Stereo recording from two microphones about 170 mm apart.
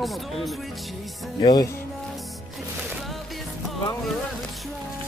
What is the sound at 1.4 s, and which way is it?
Music, 20° left (ahead or behind).